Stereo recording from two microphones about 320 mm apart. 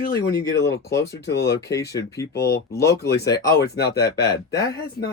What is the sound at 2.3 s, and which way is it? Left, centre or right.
Speech, left.